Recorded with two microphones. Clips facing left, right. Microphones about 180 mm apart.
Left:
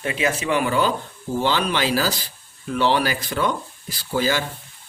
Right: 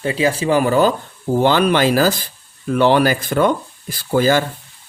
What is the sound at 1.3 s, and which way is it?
Speech, 55° right (ahead or behind).